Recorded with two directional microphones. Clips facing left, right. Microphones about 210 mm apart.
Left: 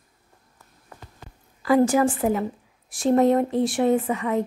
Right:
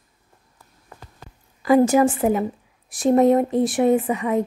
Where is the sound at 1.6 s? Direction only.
20° right (ahead or behind).